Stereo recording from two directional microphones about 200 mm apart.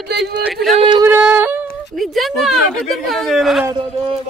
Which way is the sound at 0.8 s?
25° right (ahead or behind).